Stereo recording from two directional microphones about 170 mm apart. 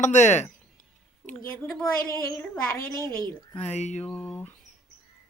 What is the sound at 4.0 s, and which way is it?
Speech, 5° left (ahead or behind).